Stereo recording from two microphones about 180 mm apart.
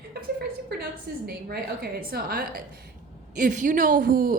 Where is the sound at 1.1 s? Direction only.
60° right (ahead or behind).